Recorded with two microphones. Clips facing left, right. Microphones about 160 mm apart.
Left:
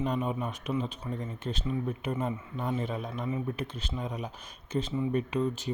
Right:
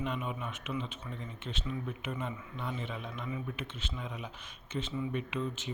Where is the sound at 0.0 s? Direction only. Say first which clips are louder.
Left 6 dB; 40° left (ahead or behind).